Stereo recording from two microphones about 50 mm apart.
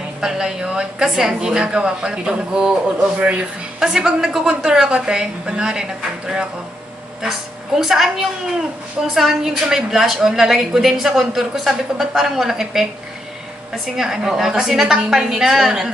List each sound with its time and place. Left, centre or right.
0.2 s a woman's voice: centre
3.2 s a man's voice: right
3.9 s a woman's voice: centre
13.9 s a woman's voice: centre